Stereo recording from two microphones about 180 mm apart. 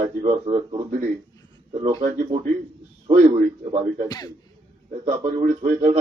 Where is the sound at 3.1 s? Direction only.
30° right (ahead or behind).